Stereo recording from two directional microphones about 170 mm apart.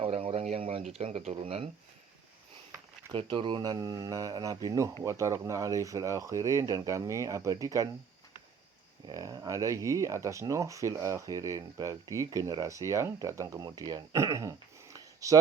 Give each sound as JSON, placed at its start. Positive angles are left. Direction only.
{"t": 0.0, "sound": "a sound", "side_deg": -35}
{"t": 0.9, "sound": "speech", "side_deg": -35}
{"t": 3.1, "sound": "speech", "side_deg": -30}
{"t": 9.0, "sound": "speech", "side_deg": -20}